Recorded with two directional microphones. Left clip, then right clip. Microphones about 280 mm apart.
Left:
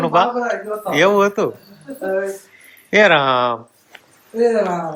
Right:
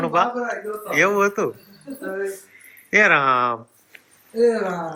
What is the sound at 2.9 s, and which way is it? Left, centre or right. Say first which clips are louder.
Speech: left 3 dB; centre.